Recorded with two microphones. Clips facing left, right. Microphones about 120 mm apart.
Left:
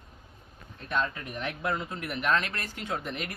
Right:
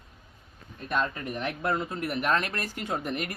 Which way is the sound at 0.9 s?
5° right (ahead or behind).